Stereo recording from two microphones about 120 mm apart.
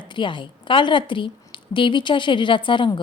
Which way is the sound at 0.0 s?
40° left (ahead or behind).